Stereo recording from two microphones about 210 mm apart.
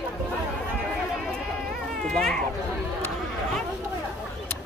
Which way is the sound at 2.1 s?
5° left (ahead or behind).